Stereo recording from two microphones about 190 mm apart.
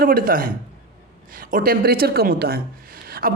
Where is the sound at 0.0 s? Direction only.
50° right (ahead or behind).